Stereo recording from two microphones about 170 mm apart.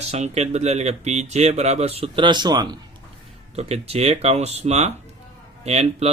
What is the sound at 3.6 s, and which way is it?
Speech, 40° right (ahead or behind).